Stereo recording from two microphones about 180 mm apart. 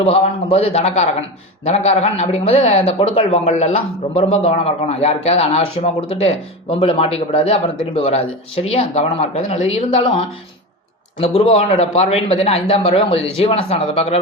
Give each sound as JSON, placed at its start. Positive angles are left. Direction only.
{"t": 0.0, "sound": "speech", "side_deg": 35}